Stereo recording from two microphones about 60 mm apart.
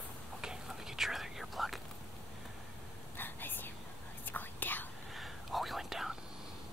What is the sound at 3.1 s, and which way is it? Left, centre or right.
Whispering, left.